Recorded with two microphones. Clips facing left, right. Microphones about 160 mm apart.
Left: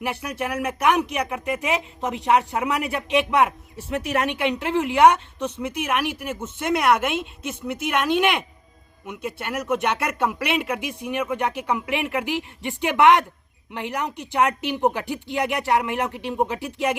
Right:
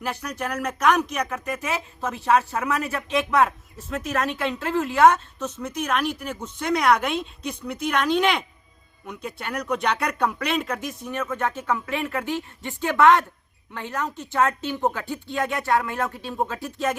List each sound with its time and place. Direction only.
0.1 s speech: 10° left (ahead or behind)